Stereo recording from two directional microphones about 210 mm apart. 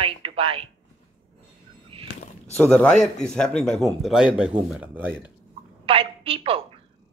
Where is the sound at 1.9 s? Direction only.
25° right (ahead or behind).